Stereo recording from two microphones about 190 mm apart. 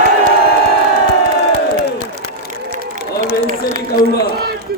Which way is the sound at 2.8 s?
55° left (ahead or behind).